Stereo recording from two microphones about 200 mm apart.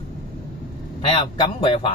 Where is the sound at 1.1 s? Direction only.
25° left (ahead or behind).